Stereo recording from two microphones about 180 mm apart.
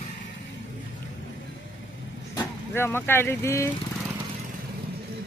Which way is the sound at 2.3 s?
15° left (ahead or behind).